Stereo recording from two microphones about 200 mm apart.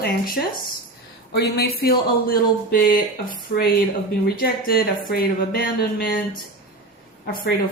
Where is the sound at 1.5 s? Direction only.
50° left (ahead or behind).